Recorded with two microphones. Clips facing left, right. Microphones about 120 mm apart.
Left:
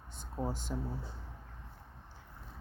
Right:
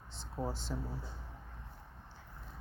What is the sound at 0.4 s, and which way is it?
Speech, 20° left (ahead or behind).